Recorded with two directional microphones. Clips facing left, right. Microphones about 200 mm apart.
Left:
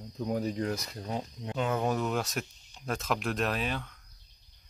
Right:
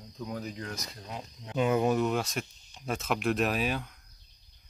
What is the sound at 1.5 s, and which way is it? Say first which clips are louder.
Speech: right 4 dB; 10° right (ahead or behind).